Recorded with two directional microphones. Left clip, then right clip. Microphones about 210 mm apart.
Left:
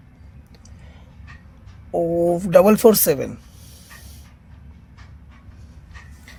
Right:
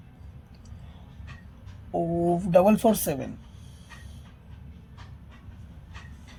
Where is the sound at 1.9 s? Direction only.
55° left (ahead or behind).